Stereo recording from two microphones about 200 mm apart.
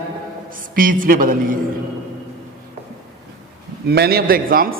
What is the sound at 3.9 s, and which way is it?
Speech, 50° right (ahead or behind).